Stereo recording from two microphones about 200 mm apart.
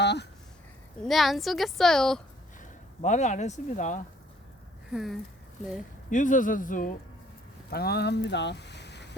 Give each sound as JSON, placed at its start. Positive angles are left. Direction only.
{"t": 0.0, "sound": "speech", "side_deg": 60}
{"t": 1.0, "sound": "a woman's voice", "side_deg": 0}
{"t": 2.6, "sound": "speech", "side_deg": 40}
{"t": 4.9, "sound": "speech", "side_deg": 0}
{"t": 6.1, "sound": "speech", "side_deg": 40}
{"t": 7.7, "sound": "speech", "side_deg": 50}